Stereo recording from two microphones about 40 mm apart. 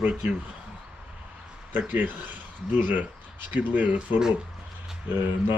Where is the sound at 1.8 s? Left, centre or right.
Right.